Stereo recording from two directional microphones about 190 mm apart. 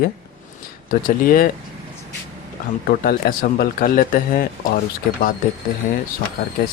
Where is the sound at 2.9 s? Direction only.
50° left (ahead or behind).